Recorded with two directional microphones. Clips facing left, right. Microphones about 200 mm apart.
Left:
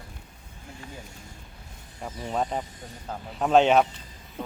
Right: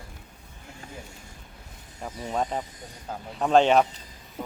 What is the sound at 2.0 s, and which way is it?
Speech, centre (ahead or behind).